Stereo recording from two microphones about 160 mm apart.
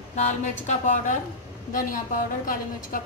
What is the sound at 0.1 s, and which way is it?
A woman's voice, 45° left (ahead or behind).